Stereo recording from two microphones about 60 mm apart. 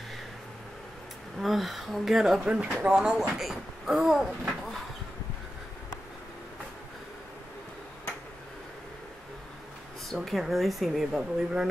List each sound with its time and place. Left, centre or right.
1.4 s speech: centre
2.4 s speech: centre
3.0 s speech: centre
10.0 s speech: centre